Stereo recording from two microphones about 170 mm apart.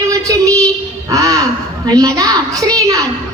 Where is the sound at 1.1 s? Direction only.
20° right (ahead or behind).